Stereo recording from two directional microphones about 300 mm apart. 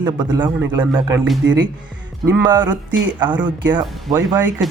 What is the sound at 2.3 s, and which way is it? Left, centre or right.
A man's voice, centre.